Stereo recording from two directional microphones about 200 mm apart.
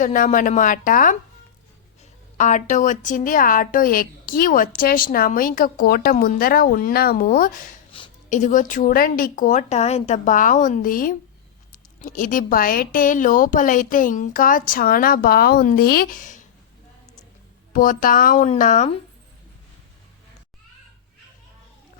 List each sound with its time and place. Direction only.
0.0 s a woman's voice: 40° left (ahead or behind)
2.4 s speech: 35° left (ahead or behind)
7.9 s a sound: 25° left (ahead or behind)
8.3 s a woman's voice: 40° left (ahead or behind)
17.7 s a woman's voice: 40° left (ahead or behind)